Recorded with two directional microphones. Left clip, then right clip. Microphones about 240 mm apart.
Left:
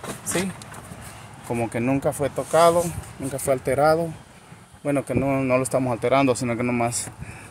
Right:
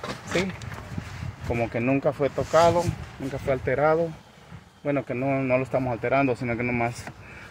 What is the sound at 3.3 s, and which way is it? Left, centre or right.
Speech, left.